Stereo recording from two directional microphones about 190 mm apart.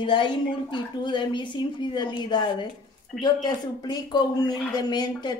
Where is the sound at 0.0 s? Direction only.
25° left (ahead or behind).